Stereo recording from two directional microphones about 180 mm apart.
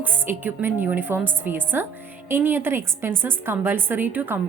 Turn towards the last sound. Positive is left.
turn(degrees=-10)  # may be behind; listen again after turning